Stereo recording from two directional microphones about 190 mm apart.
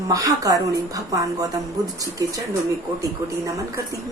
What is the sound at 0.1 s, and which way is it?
Speech, 20° right (ahead or behind).